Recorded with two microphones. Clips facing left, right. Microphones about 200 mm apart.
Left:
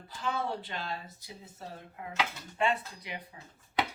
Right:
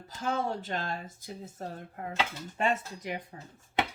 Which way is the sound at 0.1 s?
45° right (ahead or behind).